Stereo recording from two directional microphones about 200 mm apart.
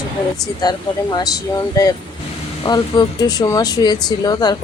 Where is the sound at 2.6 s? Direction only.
20° left (ahead or behind).